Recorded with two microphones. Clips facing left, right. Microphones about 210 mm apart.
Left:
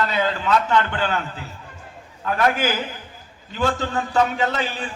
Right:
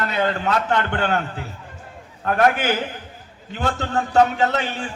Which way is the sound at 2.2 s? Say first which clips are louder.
Right 2 dB; 55° right (ahead or behind).